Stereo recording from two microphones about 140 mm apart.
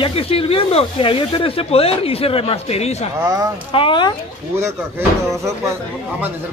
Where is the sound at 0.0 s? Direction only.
45° left (ahead or behind).